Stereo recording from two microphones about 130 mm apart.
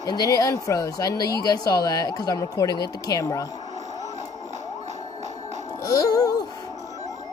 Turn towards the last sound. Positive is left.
turn(degrees=30)  # may be behind; listen again after turning